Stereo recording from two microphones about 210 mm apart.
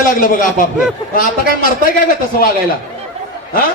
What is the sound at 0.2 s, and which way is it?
Speech, 40° left (ahead or behind).